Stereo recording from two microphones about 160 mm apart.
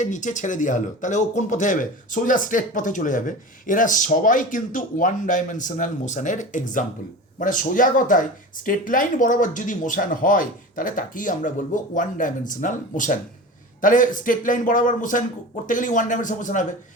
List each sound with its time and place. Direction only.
0.0 s speech: 50° left (ahead or behind)